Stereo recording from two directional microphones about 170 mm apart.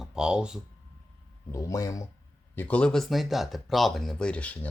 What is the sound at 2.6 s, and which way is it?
A man's voice, 10° left (ahead or behind).